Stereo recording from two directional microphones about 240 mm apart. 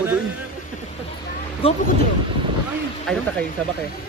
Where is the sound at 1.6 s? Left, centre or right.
Left.